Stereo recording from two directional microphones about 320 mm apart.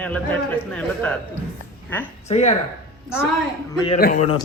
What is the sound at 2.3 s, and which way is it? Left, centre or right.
Speech, centre.